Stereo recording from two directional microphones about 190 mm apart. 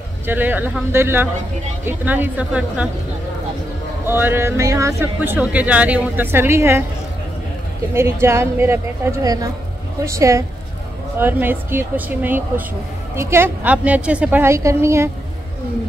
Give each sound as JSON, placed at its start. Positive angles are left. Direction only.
{"t": 0.3, "sound": "speech", "side_deg": -10}
{"t": 4.0, "sound": "speech", "side_deg": -10}
{"t": 7.9, "sound": "speech", "side_deg": -15}